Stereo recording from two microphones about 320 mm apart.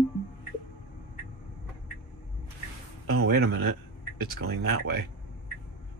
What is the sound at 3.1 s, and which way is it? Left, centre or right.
Speech, right.